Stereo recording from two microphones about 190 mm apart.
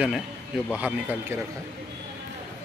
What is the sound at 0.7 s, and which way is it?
Speech, 10° right (ahead or behind).